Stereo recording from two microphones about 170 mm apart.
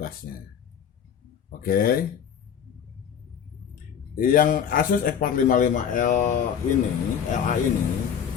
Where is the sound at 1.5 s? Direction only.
60° left (ahead or behind).